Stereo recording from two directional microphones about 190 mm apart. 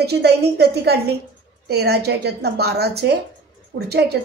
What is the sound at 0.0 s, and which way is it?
Speech, 60° right (ahead or behind).